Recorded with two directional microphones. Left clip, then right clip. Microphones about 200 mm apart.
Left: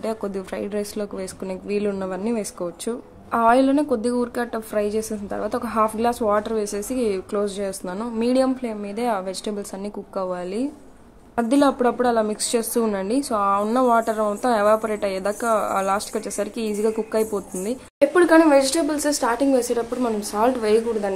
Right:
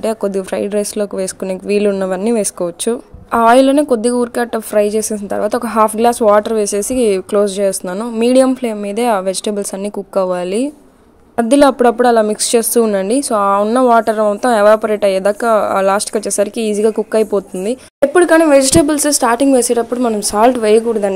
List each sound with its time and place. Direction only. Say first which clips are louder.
0.0 s a woman's voice: right 10 dB; 35° right (ahead or behind)